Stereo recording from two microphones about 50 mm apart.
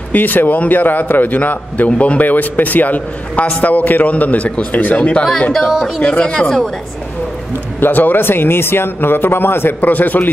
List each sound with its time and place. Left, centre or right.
0.1 s a man's voice: left
5.5 s speech: centre
6.0 s speech: centre
7.8 s speech: left
9.8 s a man's voice: left